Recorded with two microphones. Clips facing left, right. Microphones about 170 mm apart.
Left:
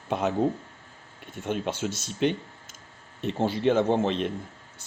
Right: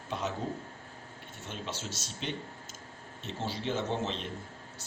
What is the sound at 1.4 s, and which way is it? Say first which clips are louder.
Speech: left 11 dB; 55° left (ahead or behind).